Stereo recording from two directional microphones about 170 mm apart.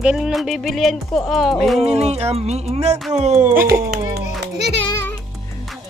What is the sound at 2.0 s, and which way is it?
Speech, 40° right (ahead or behind).